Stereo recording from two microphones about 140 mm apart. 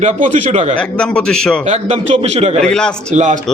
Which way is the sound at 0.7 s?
5° left (ahead or behind).